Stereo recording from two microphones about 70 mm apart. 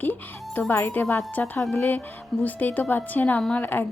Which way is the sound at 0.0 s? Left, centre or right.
Left.